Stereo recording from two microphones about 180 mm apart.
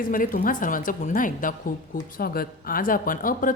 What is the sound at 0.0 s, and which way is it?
Speech, 50° left (ahead or behind).